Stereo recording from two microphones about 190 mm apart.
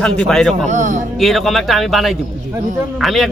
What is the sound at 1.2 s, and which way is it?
A man's voice, centre (ahead or behind).